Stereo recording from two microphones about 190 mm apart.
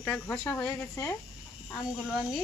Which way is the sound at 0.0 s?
5° left (ahead or behind).